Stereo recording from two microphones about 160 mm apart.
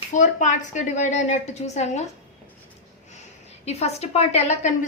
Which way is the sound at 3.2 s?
40° left (ahead or behind).